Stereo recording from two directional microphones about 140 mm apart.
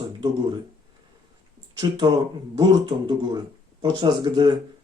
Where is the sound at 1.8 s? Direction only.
30° right (ahead or behind).